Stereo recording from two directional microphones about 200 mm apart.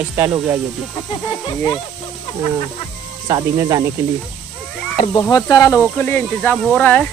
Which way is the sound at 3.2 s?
20° right (ahead or behind).